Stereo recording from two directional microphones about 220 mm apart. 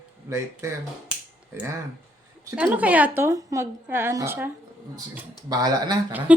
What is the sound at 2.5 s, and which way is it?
A woman's voice, 5° right (ahead or behind).